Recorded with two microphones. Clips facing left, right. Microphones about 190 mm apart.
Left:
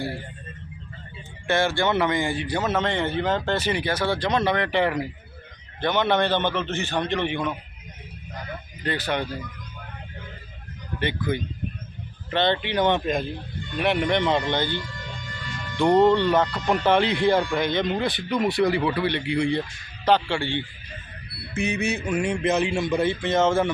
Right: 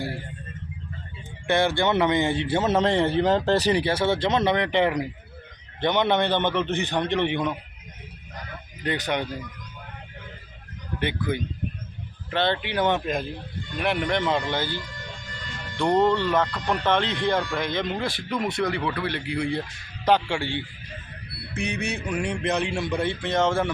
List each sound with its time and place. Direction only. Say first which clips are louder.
1.5 s a man's voice: right 1 dB; 20° right (ahead or behind)
8.8 s a man's voice: even; 15° right (ahead or behind)
12.3 s speech: left 2 dB; 5° right (ahead or behind)
15.8 s a man's voice: left 3 dB; centre (ahead or behind)
21.5 s speech: left 4 dB; 5° left (ahead or behind)